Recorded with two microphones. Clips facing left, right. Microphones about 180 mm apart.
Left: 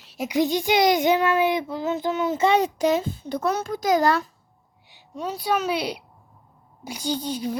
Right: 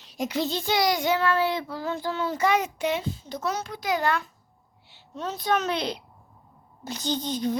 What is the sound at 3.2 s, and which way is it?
A child's voice, 55° left (ahead or behind).